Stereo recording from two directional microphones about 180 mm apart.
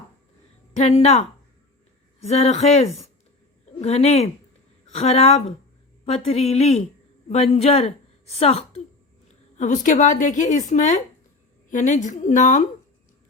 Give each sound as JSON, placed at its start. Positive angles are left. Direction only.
{"t": 0.8, "sound": "speech", "side_deg": 35}
{"t": 2.2, "sound": "a woman's voice", "side_deg": 40}